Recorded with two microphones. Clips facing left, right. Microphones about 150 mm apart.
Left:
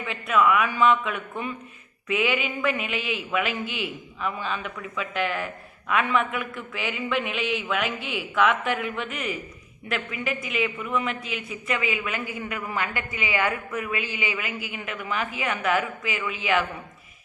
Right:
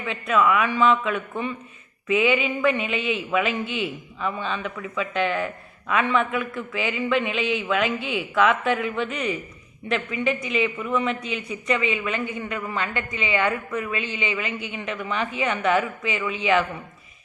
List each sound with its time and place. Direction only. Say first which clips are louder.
0.0 s a man's voice: right 1 dB; centre (ahead or behind)